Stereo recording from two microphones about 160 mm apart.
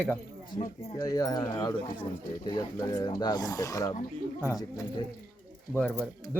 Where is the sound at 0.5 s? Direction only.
25° left (ahead or behind).